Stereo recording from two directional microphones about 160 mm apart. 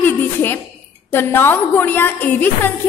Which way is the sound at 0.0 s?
10° left (ahead or behind).